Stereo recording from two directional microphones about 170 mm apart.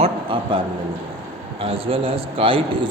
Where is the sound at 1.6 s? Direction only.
35° right (ahead or behind).